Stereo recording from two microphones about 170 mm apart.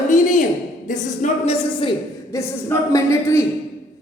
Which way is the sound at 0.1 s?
50° left (ahead or behind).